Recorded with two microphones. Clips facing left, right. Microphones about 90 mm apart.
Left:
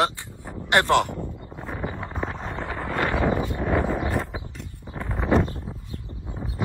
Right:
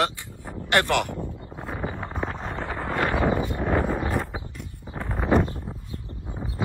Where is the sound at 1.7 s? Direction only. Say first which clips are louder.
Even; 10° right (ahead or behind).